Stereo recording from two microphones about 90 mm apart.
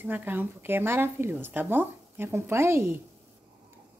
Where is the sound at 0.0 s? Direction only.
20° right (ahead or behind).